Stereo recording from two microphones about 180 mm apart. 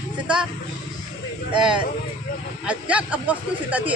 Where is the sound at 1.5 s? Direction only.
25° right (ahead or behind).